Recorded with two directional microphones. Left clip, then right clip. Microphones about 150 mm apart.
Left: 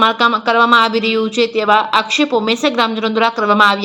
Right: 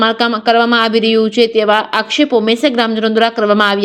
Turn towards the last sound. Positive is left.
turn(degrees=-40)  # may be behind; listen again after turning